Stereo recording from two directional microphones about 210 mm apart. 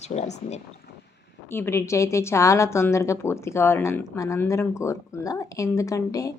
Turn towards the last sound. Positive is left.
turn(degrees=15)  # may be behind; listen again after turning